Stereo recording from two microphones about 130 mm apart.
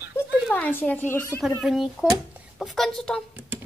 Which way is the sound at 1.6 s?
Centre (ahead or behind).